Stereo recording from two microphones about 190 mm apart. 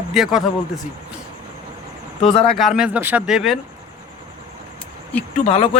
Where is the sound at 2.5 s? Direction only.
Centre (ahead or behind).